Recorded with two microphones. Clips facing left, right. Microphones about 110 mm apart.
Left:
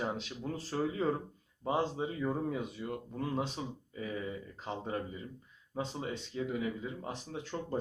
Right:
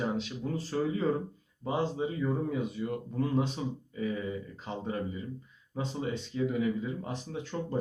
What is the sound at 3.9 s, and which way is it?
A man's voice, 35° left (ahead or behind).